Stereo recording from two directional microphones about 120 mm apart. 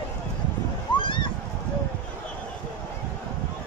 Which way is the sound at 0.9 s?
45° left (ahead or behind).